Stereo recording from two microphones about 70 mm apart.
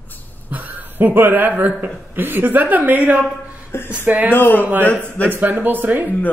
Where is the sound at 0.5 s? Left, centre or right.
Right.